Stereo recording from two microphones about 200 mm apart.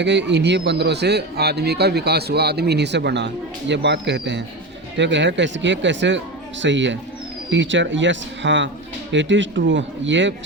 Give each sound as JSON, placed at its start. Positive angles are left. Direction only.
{"t": 0.0, "sound": "a man's voice", "side_deg": -60}